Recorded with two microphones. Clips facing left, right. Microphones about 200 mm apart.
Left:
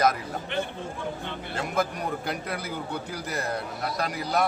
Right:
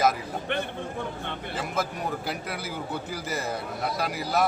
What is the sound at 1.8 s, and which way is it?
A man's voice, centre (ahead or behind).